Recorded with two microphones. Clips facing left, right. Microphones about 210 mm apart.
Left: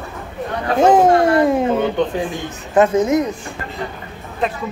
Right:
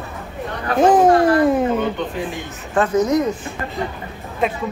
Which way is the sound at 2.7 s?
25° left (ahead or behind).